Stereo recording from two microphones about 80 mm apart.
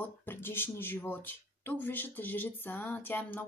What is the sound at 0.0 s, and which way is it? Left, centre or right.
Speech, left.